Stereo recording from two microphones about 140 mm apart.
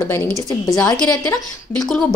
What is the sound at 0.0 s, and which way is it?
Speech, 15° left (ahead or behind).